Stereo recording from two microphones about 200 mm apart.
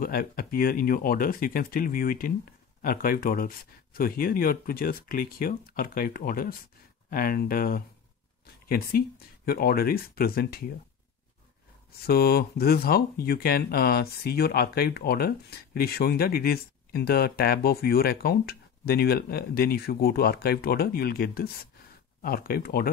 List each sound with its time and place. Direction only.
0.0 s speech: 45° left (ahead or behind)
12.1 s speech: 50° left (ahead or behind)